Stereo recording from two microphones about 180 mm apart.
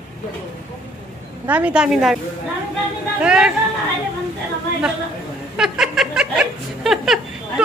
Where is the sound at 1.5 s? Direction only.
10° right (ahead or behind).